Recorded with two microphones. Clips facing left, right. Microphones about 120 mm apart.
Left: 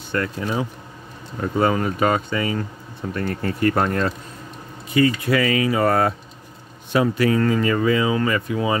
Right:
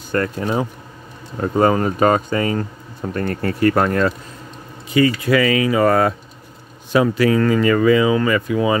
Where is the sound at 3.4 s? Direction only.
90° right.